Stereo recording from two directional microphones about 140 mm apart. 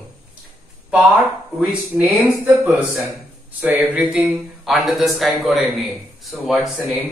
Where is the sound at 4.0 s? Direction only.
Centre (ahead or behind).